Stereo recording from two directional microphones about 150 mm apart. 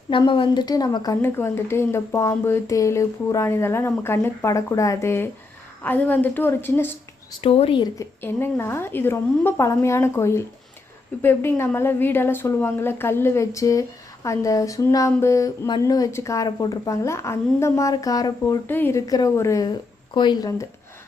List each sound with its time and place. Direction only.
0.1 s speech: 35° left (ahead or behind); by 6.9 s 15° left (ahead or behind)
7.4 s speech: 40° left (ahead or behind)
7.9 s speech: 15° left (ahead or behind)